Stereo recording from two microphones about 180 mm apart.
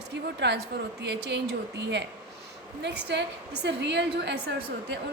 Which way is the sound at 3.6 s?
75° right (ahead or behind).